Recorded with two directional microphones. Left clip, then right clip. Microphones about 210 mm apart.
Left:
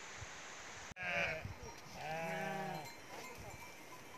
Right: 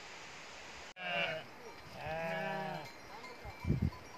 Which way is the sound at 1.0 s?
10° left (ahead or behind).